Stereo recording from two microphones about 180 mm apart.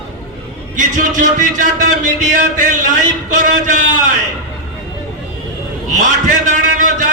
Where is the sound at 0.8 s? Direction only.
45° right (ahead or behind).